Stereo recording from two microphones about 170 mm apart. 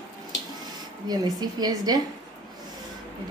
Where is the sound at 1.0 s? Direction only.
25° right (ahead or behind).